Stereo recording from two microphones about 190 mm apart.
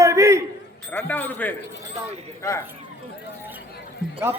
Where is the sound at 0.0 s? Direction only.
15° right (ahead or behind).